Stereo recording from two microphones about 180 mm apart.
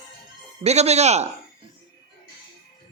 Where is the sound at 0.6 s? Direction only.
35° right (ahead or behind).